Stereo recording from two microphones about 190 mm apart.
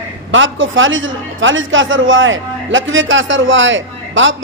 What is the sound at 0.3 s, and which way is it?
A man's voice, 90° right.